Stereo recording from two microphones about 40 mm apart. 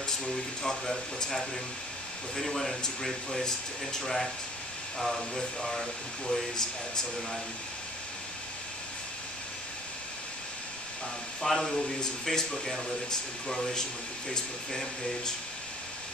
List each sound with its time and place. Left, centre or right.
0.2 s speech: centre
11.4 s speech: centre
11.7 s speech: centre